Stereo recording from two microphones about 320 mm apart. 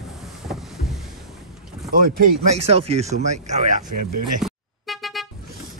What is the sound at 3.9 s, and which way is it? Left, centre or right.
Speech, right.